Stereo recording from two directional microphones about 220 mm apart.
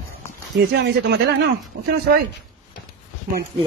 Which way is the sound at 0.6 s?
50° right (ahead or behind).